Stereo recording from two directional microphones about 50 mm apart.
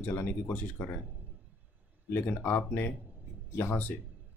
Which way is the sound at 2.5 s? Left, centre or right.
Left.